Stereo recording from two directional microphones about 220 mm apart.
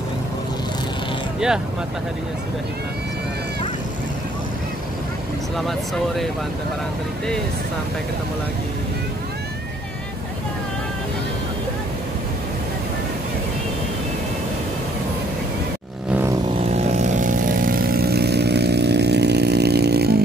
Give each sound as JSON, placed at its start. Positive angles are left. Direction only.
{"t": 16.5, "sound": "vehicle", "side_deg": -30}